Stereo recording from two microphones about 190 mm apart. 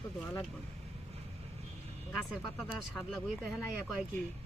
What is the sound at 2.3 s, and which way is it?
Speech, centre (ahead or behind).